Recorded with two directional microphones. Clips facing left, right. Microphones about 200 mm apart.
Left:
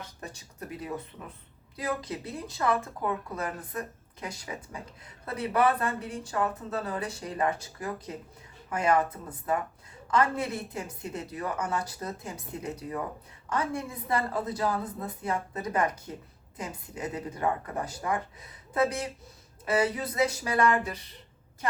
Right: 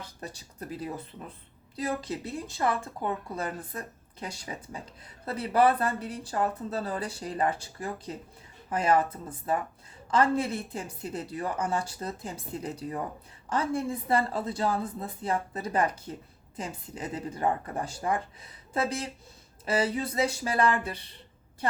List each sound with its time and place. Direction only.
0.2 s a woman's voice: 30° right (ahead or behind)
10.1 s a woman's voice: 30° right (ahead or behind)